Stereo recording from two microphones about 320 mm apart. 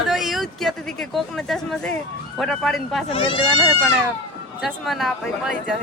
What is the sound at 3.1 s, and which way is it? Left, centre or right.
Speech, centre.